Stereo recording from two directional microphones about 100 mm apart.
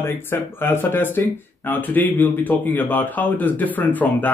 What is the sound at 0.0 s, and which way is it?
A man's voice, 25° left (ahead or behind).